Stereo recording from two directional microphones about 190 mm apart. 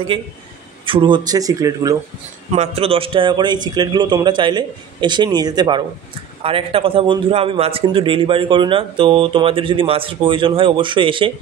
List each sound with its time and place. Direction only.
0.8 s a man's voice: 25° right (ahead or behind)
2.5 s a man's voice: 35° right (ahead or behind)